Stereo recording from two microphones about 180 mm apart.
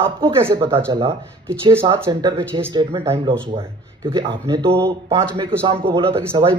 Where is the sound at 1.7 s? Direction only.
15° right (ahead or behind).